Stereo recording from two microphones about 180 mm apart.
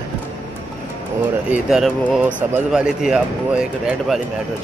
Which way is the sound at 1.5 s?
5° right (ahead or behind).